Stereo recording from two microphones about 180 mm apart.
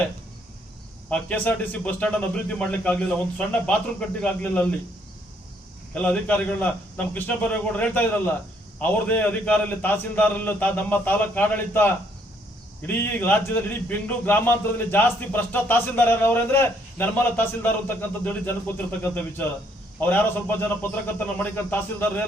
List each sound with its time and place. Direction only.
1.1 s a man's voice: 5° left (ahead or behind)
5.9 s a man's voice: 5° left (ahead or behind)